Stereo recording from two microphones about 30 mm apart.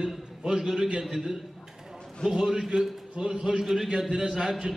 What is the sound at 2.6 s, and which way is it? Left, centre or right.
A man's voice, centre.